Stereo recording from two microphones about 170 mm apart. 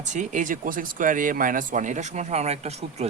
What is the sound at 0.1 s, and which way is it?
Speech, 45° right (ahead or behind).